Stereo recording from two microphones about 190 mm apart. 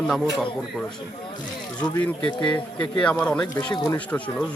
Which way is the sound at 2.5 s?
5° left (ahead or behind).